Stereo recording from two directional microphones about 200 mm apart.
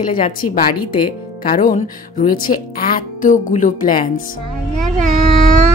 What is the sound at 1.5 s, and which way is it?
Speech, 40° left (ahead or behind).